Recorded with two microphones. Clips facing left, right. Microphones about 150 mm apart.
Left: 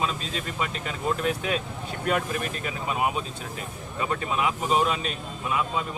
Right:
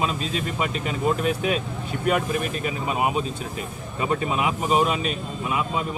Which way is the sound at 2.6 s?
20° right (ahead or behind).